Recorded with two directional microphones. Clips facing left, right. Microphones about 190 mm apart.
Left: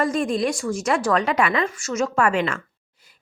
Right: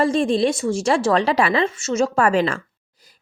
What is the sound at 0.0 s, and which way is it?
A woman's voice, 30° right (ahead or behind).